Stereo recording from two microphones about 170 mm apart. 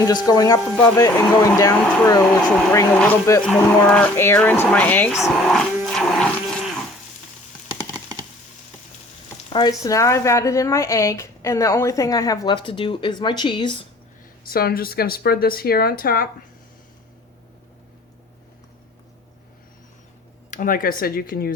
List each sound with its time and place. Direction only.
0.0 s speech: 20° left (ahead or behind)
5.1 s buzz: centre (ahead or behind)
9.5 s speech: 25° left (ahead or behind)
14.5 s speech: 60° left (ahead or behind)
20.5 s speech: 50° left (ahead or behind)